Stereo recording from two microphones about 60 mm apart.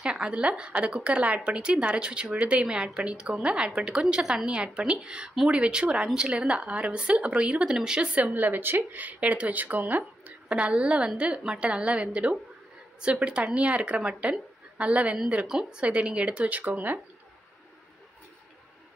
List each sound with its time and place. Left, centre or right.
0.0 s a woman's voice: centre
8.4 s a woman's voice: right